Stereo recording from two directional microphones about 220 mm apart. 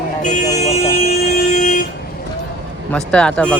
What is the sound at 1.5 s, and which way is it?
Vehicle, 35° left (ahead or behind).